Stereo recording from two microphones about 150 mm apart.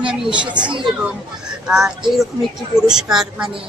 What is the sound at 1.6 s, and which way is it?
A woman's voice, 5° right (ahead or behind).